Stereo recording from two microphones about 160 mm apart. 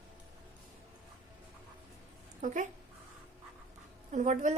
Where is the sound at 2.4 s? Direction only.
50° right (ahead or behind).